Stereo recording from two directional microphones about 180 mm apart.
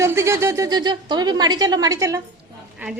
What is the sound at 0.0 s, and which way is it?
A woman's voice, 15° right (ahead or behind).